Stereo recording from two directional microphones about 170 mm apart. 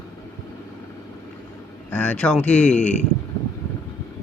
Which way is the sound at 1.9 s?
10° left (ahead or behind).